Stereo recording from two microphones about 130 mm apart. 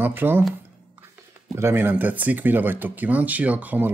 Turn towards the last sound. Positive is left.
turn(degrees=-15)  # may be behind; listen again after turning